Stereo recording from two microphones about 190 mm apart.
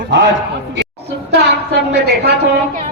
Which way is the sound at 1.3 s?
65° right (ahead or behind).